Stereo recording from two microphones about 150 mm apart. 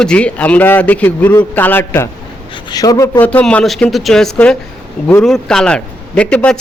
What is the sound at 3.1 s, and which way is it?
A man's voice, 10° left (ahead or behind).